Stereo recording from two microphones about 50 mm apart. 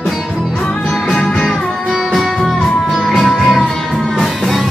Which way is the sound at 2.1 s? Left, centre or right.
Centre.